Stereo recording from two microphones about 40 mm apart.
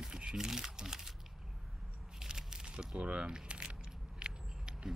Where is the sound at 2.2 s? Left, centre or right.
Centre.